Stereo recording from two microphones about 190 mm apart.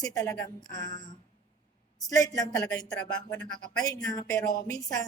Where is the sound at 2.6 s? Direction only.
5° left (ahead or behind).